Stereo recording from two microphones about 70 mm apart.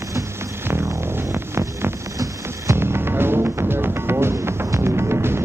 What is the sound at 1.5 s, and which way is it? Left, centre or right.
Music, right.